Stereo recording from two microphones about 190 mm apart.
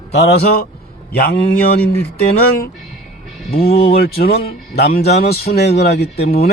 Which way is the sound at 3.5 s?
55° left (ahead or behind).